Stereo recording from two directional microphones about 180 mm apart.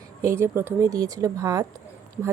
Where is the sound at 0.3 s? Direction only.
15° right (ahead or behind).